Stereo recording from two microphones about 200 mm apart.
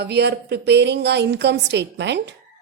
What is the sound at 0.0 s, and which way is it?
A woman's voice, 55° right (ahead or behind).